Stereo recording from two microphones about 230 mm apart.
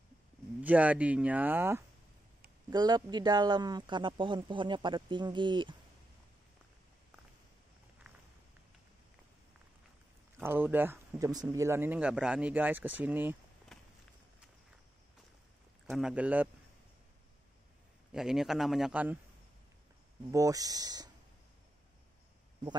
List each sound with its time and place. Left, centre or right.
0.6 s speech: centre
10.4 s speech: centre
13.7 s walk: centre
15.9 s a man's voice: centre
18.1 s a man's voice: centre
20.2 s speech: centre